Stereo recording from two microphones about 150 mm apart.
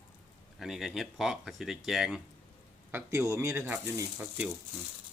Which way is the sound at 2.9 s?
20° right (ahead or behind).